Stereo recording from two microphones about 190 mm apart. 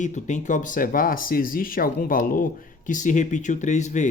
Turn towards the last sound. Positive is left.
turn(degrees=40)  # may be behind; listen again after turning